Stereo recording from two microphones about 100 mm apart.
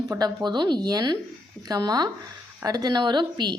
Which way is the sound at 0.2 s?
45° right (ahead or behind).